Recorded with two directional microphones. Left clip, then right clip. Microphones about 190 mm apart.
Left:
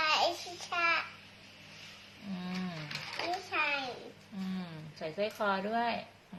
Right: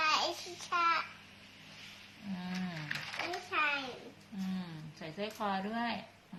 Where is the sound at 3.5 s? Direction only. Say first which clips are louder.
Right 1 dB; centre (ahead or behind).